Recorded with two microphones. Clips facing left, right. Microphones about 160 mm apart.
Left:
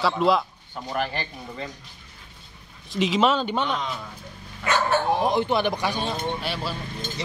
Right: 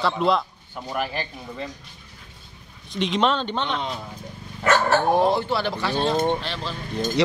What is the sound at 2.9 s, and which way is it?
Speech, 5° left (ahead or behind).